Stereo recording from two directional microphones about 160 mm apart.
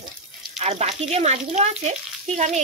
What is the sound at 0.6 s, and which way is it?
Speech, 45° right (ahead or behind).